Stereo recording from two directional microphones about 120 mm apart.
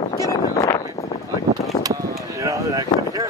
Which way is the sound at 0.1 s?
30° left (ahead or behind).